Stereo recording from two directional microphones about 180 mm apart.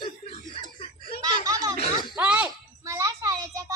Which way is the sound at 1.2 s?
20° right (ahead or behind).